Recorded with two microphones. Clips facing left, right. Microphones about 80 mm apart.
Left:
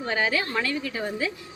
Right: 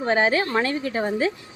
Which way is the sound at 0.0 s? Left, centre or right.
Right.